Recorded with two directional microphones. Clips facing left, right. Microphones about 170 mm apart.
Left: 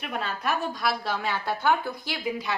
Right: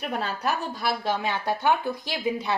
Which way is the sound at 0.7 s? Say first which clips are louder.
Right 1 dB; 25° right (ahead or behind).